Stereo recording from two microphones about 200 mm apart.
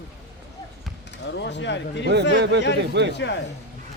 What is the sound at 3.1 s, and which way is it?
Speech, 60° left (ahead or behind).